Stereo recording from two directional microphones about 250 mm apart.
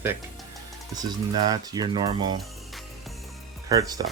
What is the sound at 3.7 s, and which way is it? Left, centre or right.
Speech, centre.